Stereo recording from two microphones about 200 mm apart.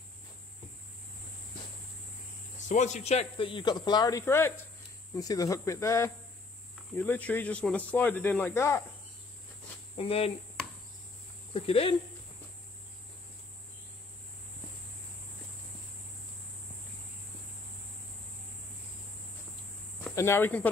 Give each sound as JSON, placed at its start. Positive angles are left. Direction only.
{"t": 2.7, "sound": "a man's voice", "side_deg": 35}
{"t": 9.9, "sound": "a man's voice", "side_deg": 30}
{"t": 11.5, "sound": "a man's voice", "side_deg": 30}
{"t": 20.0, "sound": "speech", "side_deg": 10}